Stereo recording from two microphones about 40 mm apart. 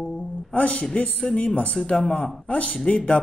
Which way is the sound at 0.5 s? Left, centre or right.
Left.